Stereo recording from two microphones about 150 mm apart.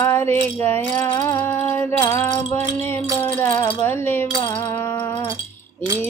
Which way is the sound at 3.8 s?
15° left (ahead or behind).